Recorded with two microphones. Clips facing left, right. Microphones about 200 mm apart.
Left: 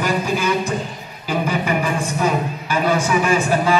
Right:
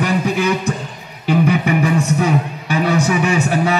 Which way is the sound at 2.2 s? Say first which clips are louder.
Right 2 dB; 70° right (ahead or behind).